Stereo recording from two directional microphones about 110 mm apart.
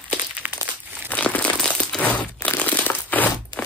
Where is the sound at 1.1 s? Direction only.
15° left (ahead or behind).